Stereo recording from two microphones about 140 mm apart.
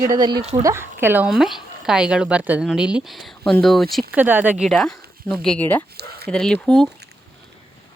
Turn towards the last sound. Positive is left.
turn(degrees=5)  # may be behind; listen again after turning